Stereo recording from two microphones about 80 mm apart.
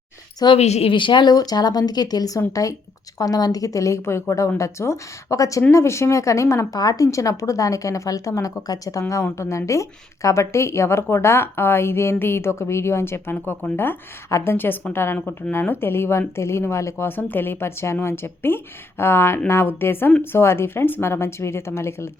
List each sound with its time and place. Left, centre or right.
0.3 s a woman's voice: left
14.3 s speech: left
14.5 s a woman's voice: left
17.1 s a woman's voice: left